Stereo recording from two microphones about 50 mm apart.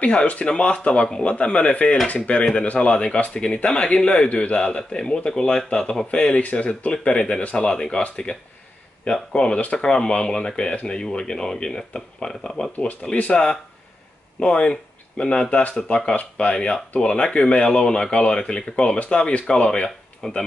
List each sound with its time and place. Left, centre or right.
0.0 s speech: left
6.3 s speech: left